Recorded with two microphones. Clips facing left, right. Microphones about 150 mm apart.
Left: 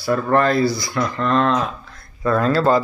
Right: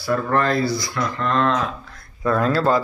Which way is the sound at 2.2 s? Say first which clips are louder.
Left 2 dB; 5° right (ahead or behind).